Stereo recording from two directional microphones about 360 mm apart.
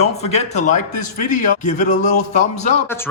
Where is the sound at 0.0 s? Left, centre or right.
Centre.